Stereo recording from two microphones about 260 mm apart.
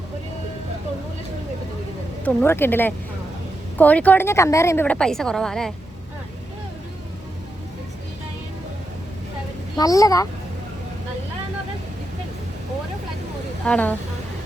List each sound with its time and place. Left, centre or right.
2.2 s a woman's voice: centre
9.7 s speech: centre
13.7 s a woman's voice: centre